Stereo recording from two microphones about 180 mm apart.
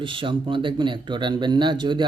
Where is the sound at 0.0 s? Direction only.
30° right (ahead or behind).